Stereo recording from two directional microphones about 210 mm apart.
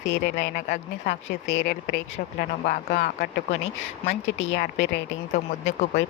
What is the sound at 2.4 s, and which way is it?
Speech, 40° left (ahead or behind).